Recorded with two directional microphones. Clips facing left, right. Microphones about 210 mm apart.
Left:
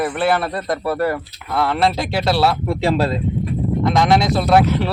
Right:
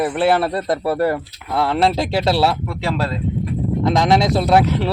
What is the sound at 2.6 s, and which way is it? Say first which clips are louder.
Speech: left 4 dB; 25° left (ahead or behind).